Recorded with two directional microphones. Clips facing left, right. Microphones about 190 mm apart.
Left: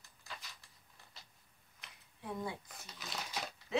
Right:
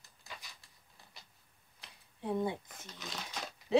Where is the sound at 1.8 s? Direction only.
30° right (ahead or behind).